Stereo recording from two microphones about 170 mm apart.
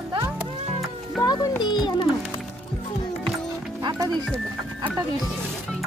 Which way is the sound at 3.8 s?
25° right (ahead or behind).